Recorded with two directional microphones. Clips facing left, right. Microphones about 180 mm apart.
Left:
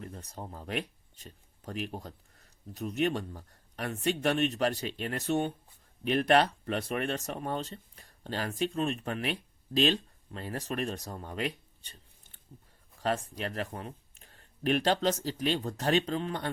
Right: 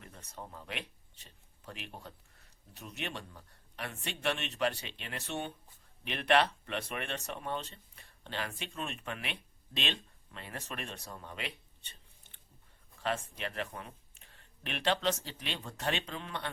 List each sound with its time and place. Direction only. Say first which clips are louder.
0.0 s speech: left 6 dB; 35° left (ahead or behind)
13.0 s speech: left 4 dB; 40° left (ahead or behind)